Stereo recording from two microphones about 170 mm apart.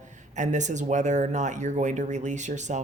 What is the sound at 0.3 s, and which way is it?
Speech, 45° right (ahead or behind).